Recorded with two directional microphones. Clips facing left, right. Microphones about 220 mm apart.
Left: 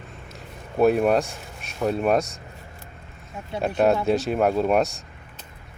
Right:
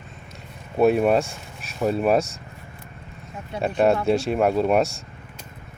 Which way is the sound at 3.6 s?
Centre (ahead or behind).